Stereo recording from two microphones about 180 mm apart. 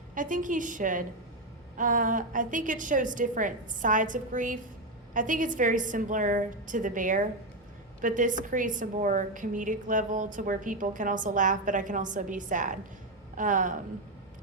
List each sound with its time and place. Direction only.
0.1 s a woman's voice: 45° right (ahead or behind)